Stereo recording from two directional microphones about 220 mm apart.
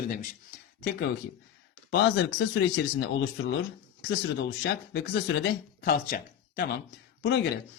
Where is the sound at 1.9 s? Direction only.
50° left (ahead or behind).